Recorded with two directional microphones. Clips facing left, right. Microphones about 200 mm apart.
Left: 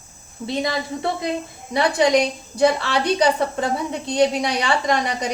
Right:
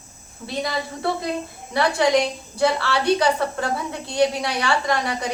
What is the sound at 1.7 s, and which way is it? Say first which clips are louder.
A woman's voice: left 2 dB; 15° left (ahead or behind).